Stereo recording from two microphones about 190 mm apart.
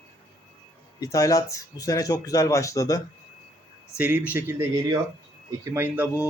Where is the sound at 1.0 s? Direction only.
20° left (ahead or behind).